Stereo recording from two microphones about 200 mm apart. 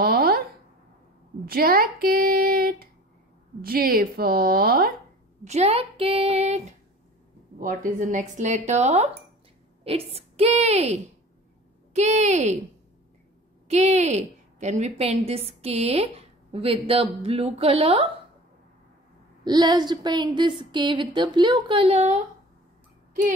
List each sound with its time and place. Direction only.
0.0 s a sound: 50° right (ahead or behind)
1.4 s a sound: 50° right (ahead or behind)
3.6 s a woman's voice: 50° right (ahead or behind)
5.4 s a woman's voice: 30° right (ahead or behind)
13.7 s a woman's voice: 35° right (ahead or behind)
19.4 s a woman's voice: 20° right (ahead or behind)